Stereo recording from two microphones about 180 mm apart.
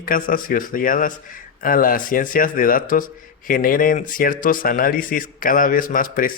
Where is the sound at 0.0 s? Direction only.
50° left (ahead or behind).